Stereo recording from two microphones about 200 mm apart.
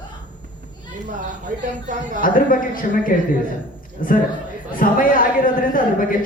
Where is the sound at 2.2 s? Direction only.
45° left (ahead or behind).